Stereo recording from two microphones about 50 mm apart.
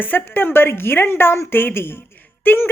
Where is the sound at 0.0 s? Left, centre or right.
Left.